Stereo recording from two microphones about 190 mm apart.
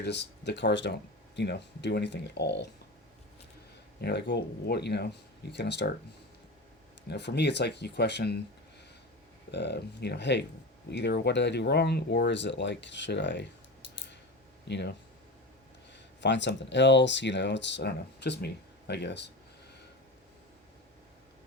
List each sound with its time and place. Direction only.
0.0 s speech: 65° left (ahead or behind)
4.0 s speech: 65° left (ahead or behind)
7.1 s speech: 65° left (ahead or behind)
9.5 s speech: 60° left (ahead or behind)
14.7 s speech: 65° left (ahead or behind)
16.2 s speech: 70° left (ahead or behind)